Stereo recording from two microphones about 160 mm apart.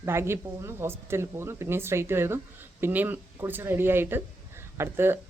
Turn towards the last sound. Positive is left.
turn(degrees=-15)  # may be behind; listen again after turning